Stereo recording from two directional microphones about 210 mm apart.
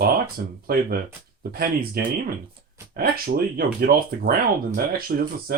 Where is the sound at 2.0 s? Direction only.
45° right (ahead or behind).